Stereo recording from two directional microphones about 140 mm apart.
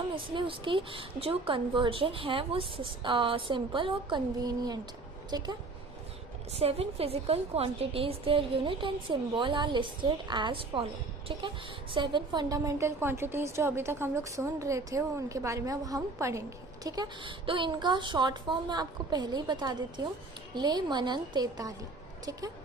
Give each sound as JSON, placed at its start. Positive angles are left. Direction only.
{"t": 0.3, "sound": "a woman's voice", "side_deg": -35}
{"t": 6.5, "sound": "a woman's voice", "side_deg": -45}